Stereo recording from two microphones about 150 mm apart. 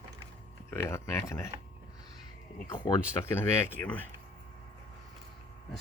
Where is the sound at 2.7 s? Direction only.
30° left (ahead or behind).